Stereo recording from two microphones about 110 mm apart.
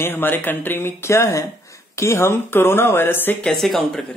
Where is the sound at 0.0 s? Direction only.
20° left (ahead or behind).